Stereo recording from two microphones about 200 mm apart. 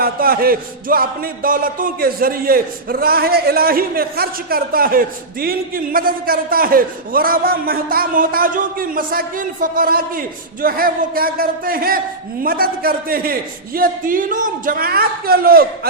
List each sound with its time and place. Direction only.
0.0 s music: 45° right (ahead or behind)